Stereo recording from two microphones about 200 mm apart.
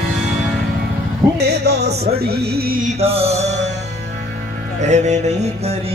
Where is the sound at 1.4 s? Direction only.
55° right (ahead or behind).